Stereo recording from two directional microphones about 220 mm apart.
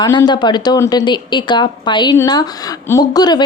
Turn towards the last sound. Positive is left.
turn(degrees=20)  # may be behind; listen again after turning